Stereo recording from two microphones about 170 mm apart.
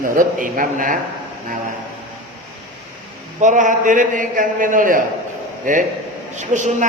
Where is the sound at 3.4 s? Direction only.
45° right (ahead or behind).